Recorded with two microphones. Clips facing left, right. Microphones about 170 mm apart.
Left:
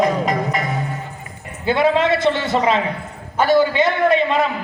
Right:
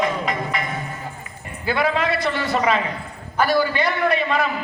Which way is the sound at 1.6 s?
25° left (ahead or behind).